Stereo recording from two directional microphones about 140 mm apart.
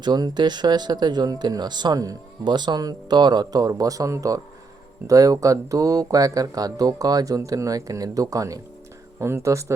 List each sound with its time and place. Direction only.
0.0 s speech: 30° right (ahead or behind)